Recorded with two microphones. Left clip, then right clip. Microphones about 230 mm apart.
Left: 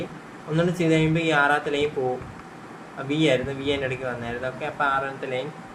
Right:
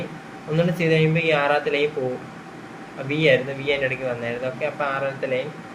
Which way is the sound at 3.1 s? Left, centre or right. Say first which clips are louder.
Right 3 dB; left.